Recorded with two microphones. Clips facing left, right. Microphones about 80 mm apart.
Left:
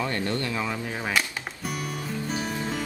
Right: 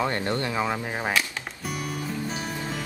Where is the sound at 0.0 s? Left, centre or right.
Right.